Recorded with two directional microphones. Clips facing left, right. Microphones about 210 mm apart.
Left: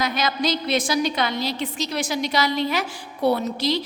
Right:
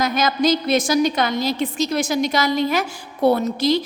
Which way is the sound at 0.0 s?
45° right (ahead or behind).